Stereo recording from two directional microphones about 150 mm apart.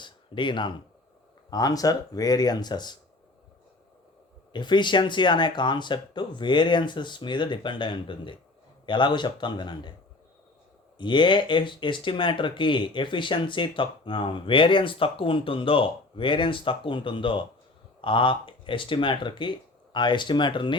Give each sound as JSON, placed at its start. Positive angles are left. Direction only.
{"t": 0.0, "sound": "a sound", "side_deg": 30}
{"t": 1.5, "sound": "speech", "side_deg": 25}
{"t": 4.5, "sound": "speech", "side_deg": 30}
{"t": 10.9, "sound": "speech", "side_deg": 30}